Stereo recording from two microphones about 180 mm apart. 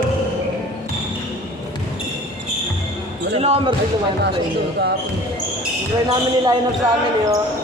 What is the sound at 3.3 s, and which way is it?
Speech, 35° right (ahead or behind).